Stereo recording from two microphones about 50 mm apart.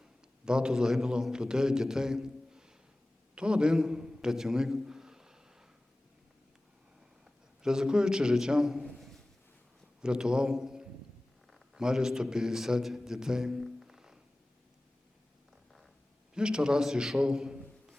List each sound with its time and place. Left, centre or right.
0.0 s a man's voice: centre
7.6 s a man's voice: centre
10.0 s a man's voice: centre
10.6 s a sound: centre
11.5 s a man's voice: centre
16.3 s a man's voice: centre